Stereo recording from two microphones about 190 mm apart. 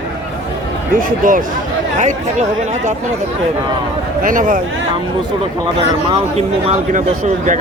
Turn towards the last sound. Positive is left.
turn(degrees=-35)  # may be behind; listen again after turning